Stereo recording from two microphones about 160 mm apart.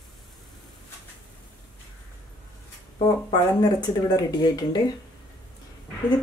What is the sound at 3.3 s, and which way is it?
Speech, 25° left (ahead or behind).